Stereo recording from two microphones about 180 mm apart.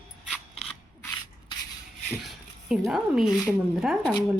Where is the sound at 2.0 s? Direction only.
Centre (ahead or behind).